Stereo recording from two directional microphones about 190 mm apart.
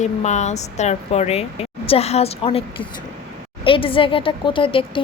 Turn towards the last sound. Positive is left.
turn(degrees=25)  # may be behind; listen again after turning